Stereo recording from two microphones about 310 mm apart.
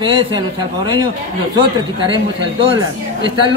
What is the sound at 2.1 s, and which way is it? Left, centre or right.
Speech, centre.